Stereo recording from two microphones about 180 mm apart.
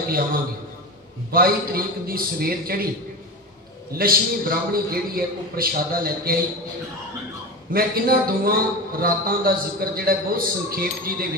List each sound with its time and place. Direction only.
1.3 s a man's voice: 55° right (ahead or behind)
3.9 s a man's voice: 55° right (ahead or behind)
7.7 s a man's voice: 55° right (ahead or behind)